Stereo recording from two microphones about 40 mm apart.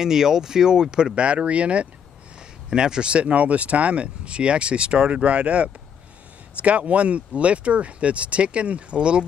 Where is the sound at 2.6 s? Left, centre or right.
Centre.